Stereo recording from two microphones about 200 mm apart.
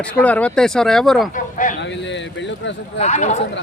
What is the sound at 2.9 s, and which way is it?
Speech, 35° left (ahead or behind).